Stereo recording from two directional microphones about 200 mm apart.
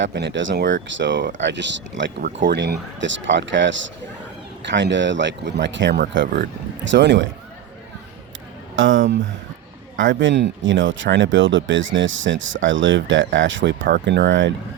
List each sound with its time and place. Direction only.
0.0 s speech: 60° right (ahead or behind)
8.8 s speech: 70° right (ahead or behind)
10.0 s speech: 65° right (ahead or behind)
13.8 s speech: 55° right (ahead or behind)